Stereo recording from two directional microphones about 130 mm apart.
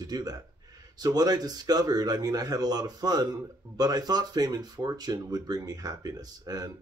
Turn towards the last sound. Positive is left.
turn(degrees=-30)  # may be behind; listen again after turning